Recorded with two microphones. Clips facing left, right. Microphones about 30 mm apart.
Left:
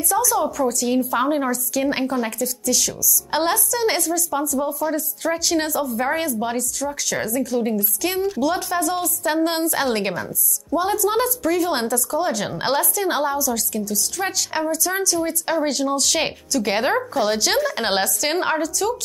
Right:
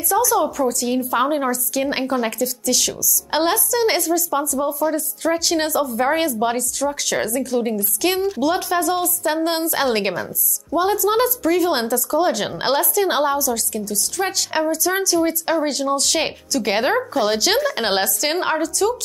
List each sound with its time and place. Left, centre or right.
0.1 s a woman's voice: centre
6.1 s a woman's voice: right
7.7 s a woman's voice: right
8.4 s a woman's voice: centre
13.5 s a woman's voice: centre